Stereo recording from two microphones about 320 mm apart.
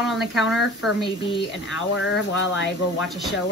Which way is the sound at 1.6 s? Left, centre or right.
Left.